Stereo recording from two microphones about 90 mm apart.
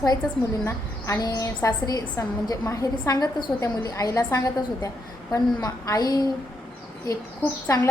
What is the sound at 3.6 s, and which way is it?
A woman's voice, 40° left (ahead or behind).